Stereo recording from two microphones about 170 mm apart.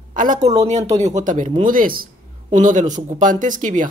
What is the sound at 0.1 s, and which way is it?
A woman's voice, 50° right (ahead or behind).